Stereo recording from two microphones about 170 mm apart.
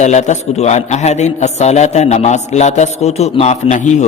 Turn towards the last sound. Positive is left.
turn(degrees=45)  # may be behind; listen again after turning